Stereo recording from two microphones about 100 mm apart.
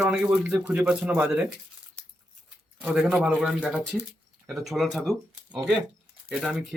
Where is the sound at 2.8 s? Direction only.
10° right (ahead or behind).